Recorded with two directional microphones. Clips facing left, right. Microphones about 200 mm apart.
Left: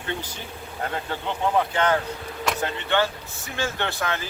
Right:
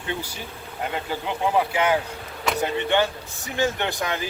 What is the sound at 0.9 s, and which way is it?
Speech, 5° right (ahead or behind).